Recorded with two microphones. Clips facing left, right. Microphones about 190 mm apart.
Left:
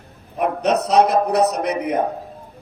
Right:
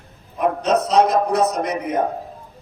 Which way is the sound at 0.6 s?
65° left (ahead or behind).